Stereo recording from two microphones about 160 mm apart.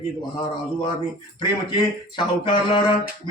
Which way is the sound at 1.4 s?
30° left (ahead or behind).